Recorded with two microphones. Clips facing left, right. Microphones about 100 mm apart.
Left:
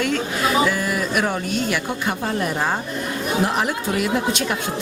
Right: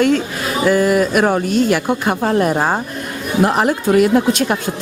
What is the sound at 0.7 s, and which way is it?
Speech, 50° right (ahead or behind).